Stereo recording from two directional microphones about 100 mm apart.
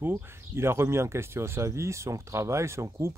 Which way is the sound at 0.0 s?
25° right (ahead or behind).